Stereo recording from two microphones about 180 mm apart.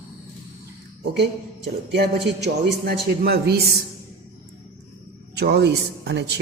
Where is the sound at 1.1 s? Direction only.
75° right (ahead or behind).